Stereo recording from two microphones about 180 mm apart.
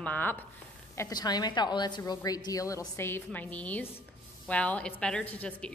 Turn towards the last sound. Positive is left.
turn(degrees=5)  # may be behind; listen again after turning